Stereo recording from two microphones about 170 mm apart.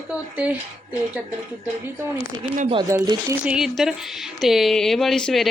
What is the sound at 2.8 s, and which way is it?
Speech, 20° right (ahead or behind).